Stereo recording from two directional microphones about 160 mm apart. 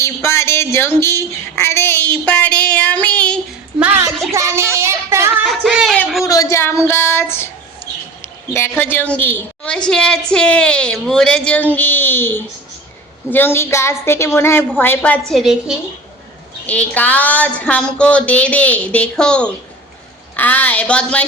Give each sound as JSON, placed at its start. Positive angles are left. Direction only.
{"t": 0.0, "sound": "speech", "side_deg": 15}
{"t": 3.8, "sound": "a woman's voice", "side_deg": -10}
{"t": 4.3, "sound": "child singing", "side_deg": -15}
{"t": 5.5, "sound": "a sound", "side_deg": 0}
{"t": 6.2, "sound": "a woman's voice", "side_deg": 20}
{"t": 15.3, "sound": "a woman's voice", "side_deg": 0}
{"t": 16.6, "sound": "a woman's voice", "side_deg": 10}